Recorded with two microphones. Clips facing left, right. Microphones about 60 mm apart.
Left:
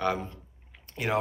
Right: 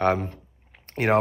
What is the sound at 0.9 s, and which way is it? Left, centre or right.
Speech, right.